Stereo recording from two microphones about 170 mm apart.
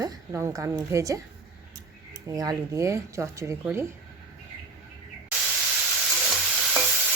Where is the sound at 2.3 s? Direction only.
20° right (ahead or behind).